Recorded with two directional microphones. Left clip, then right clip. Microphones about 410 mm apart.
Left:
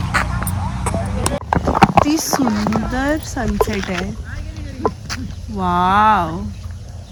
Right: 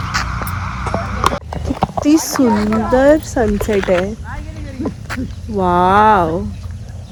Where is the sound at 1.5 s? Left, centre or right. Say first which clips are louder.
Left 7 dB; left.